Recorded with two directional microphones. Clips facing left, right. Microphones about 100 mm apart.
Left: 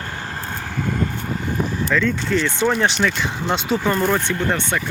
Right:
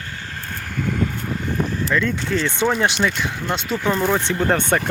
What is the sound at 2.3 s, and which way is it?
Speech, 25° right (ahead or behind).